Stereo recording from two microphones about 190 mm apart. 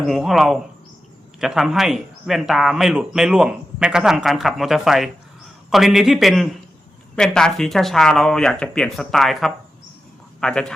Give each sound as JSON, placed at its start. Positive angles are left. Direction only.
{"t": 0.1, "sound": "a man's voice", "side_deg": 0}